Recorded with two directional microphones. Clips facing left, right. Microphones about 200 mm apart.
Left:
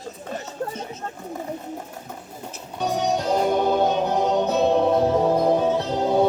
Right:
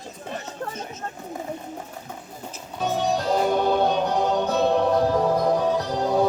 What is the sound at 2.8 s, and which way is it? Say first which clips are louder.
Music: left 1 dB; centre (ahead or behind).